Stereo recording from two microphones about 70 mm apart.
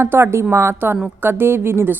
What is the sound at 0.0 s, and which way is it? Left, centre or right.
Speech, right.